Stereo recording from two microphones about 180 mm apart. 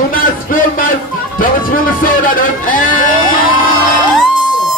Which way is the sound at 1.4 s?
50° left (ahead or behind).